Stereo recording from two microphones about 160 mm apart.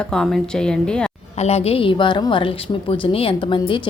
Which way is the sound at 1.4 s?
40° left (ahead or behind).